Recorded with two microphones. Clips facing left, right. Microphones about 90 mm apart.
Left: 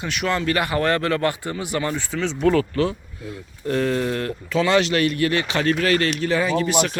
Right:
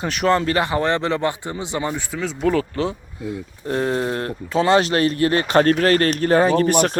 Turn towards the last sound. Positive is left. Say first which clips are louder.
# right 4 dB
turn(degrees=-50)  # may be behind; listen again after turning